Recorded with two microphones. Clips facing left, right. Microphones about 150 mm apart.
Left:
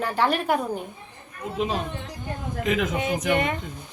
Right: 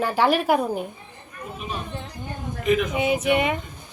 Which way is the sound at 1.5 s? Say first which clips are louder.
Left 6 dB; 90° left.